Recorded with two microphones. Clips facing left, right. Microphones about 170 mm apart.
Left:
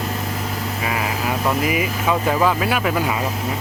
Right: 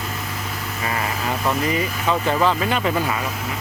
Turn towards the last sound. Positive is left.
turn(degrees=5)  # may be behind; listen again after turning